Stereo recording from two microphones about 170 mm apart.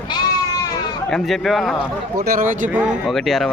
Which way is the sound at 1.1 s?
Centre (ahead or behind).